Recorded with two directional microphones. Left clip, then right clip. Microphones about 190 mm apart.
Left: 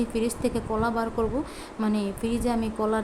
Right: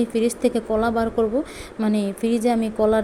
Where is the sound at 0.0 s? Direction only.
20° right (ahead or behind).